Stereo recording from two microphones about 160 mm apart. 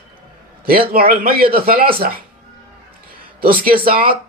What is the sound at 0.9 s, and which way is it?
A man's voice, 65° right (ahead or behind).